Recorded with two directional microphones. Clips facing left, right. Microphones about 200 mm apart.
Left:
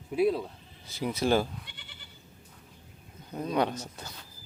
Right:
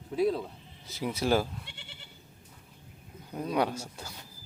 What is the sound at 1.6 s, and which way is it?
Goat, 25° right (ahead or behind).